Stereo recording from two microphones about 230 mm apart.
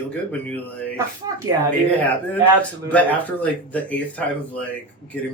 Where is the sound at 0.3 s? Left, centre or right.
Centre.